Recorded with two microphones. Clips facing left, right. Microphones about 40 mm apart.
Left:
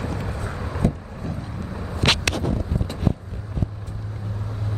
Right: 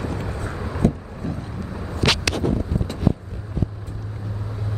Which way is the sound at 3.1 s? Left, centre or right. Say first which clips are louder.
Right 3 dB; right.